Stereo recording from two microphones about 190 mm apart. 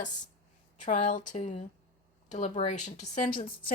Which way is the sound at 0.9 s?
40° left (ahead or behind).